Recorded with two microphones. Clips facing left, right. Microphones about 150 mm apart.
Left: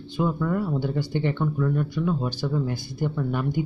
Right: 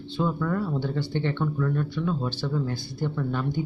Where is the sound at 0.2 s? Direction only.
15° left (ahead or behind).